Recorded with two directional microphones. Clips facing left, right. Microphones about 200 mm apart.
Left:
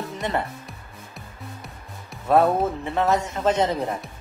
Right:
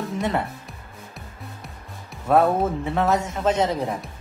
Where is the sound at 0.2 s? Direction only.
Centre (ahead or behind).